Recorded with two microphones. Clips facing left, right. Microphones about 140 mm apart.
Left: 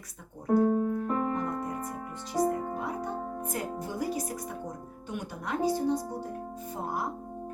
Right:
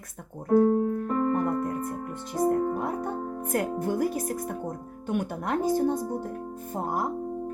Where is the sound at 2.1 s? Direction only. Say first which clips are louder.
Right 3 dB; 55° right (ahead or behind).